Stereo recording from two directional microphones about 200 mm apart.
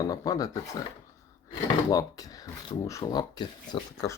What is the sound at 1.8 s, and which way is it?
Speech, 20° left (ahead or behind).